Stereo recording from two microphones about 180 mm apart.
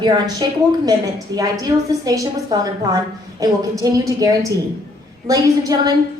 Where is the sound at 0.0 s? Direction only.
25° right (ahead or behind).